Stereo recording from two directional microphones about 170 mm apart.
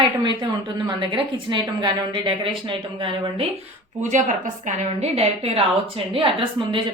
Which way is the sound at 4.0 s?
45° right (ahead or behind).